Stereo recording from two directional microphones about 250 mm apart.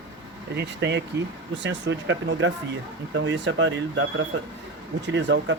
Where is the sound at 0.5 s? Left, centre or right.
Right.